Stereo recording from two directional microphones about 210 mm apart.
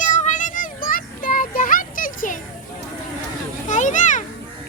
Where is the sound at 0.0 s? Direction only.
35° left (ahead or behind).